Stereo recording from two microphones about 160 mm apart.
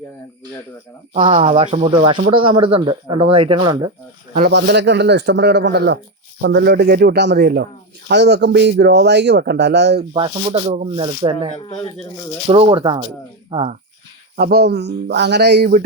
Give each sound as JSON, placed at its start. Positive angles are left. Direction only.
{"t": 1.2, "sound": "speech", "side_deg": -50}
{"t": 4.4, "sound": "a man's voice", "side_deg": -80}
{"t": 10.1, "sound": "speech", "side_deg": -35}
{"t": 12.5, "sound": "speech", "side_deg": -35}
{"t": 14.3, "sound": "speech", "side_deg": -75}